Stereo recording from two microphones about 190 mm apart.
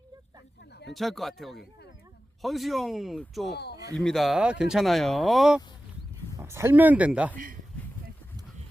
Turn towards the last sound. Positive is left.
turn(degrees=-5)  # may be behind; listen again after turning